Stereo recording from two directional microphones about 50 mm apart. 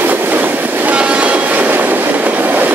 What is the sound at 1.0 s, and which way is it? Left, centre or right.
Train, right.